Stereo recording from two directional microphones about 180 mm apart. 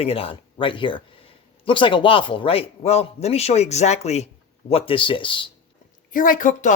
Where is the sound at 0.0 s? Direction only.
30° left (ahead or behind).